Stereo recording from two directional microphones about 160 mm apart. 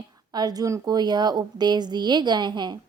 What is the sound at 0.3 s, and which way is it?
A woman's voice, 25° right (ahead or behind).